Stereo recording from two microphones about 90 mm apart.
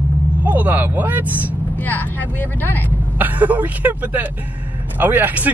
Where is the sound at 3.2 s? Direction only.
20° right (ahead or behind).